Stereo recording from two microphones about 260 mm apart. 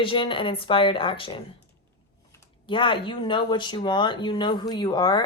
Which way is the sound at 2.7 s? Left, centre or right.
Centre.